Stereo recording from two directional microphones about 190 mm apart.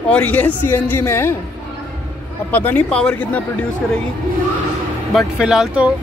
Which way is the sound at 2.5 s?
10° left (ahead or behind).